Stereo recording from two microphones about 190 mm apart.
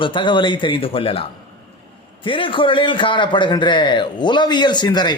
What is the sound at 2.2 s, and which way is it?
A man's voice, 25° left (ahead or behind).